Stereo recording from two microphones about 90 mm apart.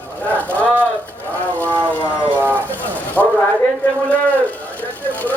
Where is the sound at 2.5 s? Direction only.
20° left (ahead or behind).